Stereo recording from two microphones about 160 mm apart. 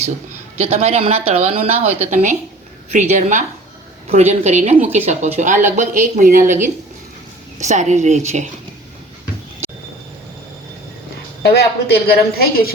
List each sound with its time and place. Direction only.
0.6 s speech: 40° right (ahead or behind)
11.4 s a woman's voice: 85° left; by 12.7 s 70° left (ahead or behind)